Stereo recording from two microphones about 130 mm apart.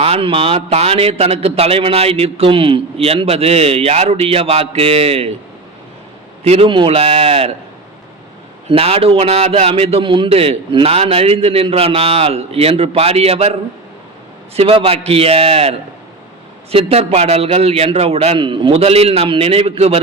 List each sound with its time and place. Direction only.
0.0 s a man's voice: 50° right (ahead or behind)
6.4 s a man's voice: 45° right (ahead or behind)
8.7 s a man's voice: 50° right (ahead or behind)
16.7 s a man's voice: 50° right (ahead or behind)